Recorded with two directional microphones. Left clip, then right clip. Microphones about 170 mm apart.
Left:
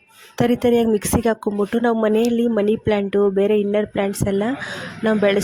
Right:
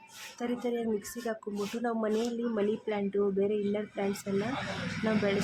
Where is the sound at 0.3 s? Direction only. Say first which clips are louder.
Left 17 dB; 55° left (ahead or behind).